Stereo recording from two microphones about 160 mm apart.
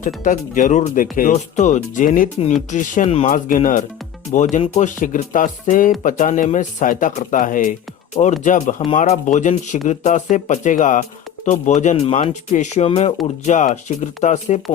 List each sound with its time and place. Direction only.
0.0 s speech: 55° left (ahead or behind)